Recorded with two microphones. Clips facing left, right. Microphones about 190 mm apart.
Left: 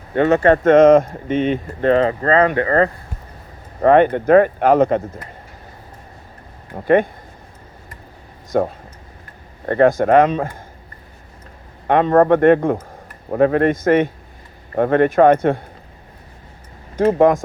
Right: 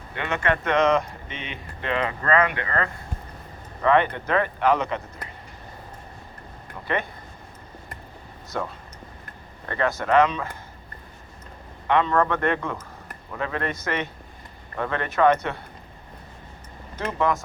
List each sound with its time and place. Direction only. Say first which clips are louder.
0.1 s speech: left 12 dB; 40° left (ahead or behind)
2.2 s speech: left 7 dB; 35° left (ahead or behind)
3.8 s speech: left 8 dB; 45° left (ahead or behind)
6.7 s speech: left 13 dB; 50° left (ahead or behind)
8.5 s speech: left 12 dB; 50° left (ahead or behind)
11.9 s speech: left 9 dB; 50° left (ahead or behind)
17.0 s speech: left 11 dB; 50° left (ahead or behind)